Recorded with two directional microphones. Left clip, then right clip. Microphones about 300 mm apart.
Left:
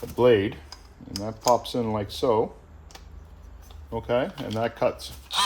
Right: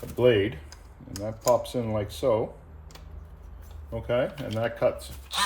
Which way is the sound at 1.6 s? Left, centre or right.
Left.